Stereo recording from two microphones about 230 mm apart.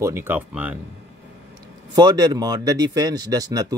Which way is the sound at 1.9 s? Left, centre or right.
Centre.